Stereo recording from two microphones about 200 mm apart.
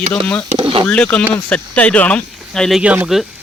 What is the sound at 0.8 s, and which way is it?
Speech, 5° left (ahead or behind).